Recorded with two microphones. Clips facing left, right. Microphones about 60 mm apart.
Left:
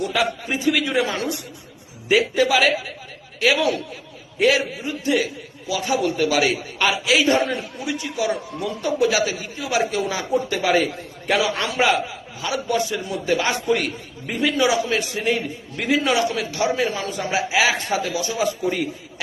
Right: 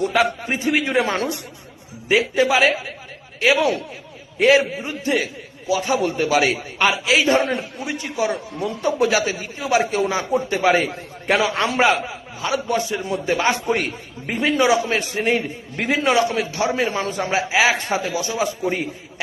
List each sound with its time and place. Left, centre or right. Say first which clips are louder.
0.4 s a man's voice: even; right
2.3 s a man's voice: right 1 dB; right
6.7 s a man's voice: right 2 dB; right